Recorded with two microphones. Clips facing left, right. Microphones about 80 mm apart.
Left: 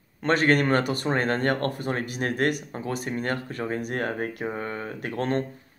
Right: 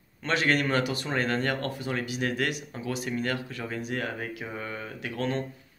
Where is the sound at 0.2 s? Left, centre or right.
Left.